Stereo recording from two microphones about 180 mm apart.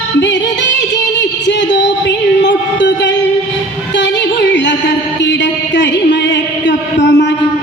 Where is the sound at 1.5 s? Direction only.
75° left (ahead or behind).